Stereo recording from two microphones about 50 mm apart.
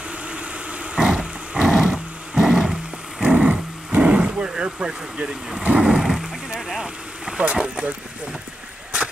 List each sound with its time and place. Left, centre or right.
0.3 s a sound: right
3.2 s vehicle: right
5.9 s speech: centre
6.8 s boat: centre
7.5 s speech: centre